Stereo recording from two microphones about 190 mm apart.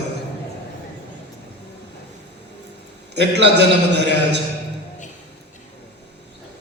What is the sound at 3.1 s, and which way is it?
A man's voice, 65° right (ahead or behind).